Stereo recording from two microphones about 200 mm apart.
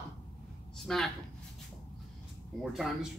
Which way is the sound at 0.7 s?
Centre (ahead or behind).